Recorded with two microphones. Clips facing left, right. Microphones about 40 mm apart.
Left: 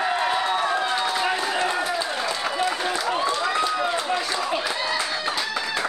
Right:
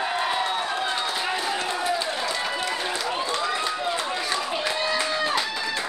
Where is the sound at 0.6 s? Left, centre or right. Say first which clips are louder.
Left 3 dB; left.